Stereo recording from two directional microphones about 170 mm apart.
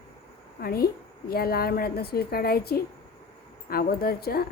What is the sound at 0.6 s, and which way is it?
A woman's voice, 65° left (ahead or behind).